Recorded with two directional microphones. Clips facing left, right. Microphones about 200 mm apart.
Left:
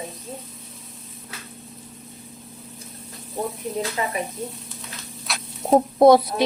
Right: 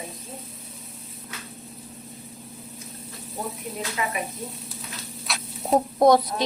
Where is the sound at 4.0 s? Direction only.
35° left (ahead or behind).